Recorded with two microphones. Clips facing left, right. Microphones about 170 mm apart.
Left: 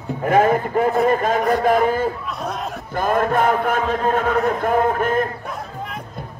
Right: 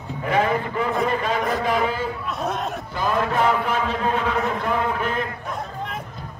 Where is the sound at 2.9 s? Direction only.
50° left (ahead or behind).